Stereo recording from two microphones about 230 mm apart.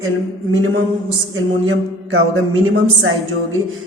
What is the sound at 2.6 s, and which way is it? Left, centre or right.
Speech, right.